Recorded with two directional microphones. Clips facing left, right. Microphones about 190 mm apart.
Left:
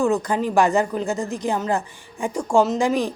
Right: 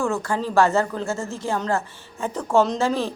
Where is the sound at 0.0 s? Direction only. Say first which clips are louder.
Left 4 dB; 20° left (ahead or behind).